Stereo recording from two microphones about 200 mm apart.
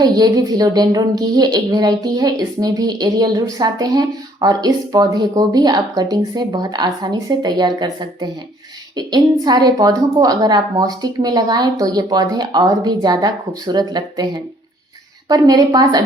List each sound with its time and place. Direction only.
0.0 s a woman's voice: 20° right (ahead or behind)